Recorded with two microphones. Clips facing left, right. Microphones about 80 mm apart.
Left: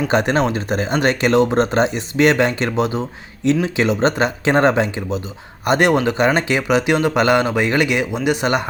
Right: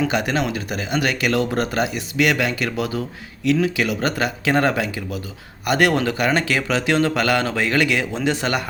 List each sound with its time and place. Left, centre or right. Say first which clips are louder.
0.1 s speech: left 5 dB; left